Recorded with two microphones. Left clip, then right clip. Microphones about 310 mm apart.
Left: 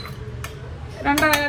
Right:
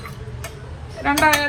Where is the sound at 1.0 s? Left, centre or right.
Centre.